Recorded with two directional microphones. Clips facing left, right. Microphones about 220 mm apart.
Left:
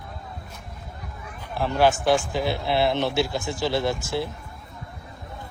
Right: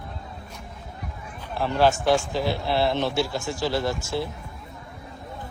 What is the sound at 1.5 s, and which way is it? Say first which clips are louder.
A man's voice: even; 15° left (ahead or behind).